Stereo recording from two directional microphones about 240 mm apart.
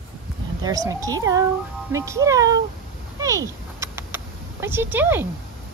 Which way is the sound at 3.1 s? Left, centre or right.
Centre.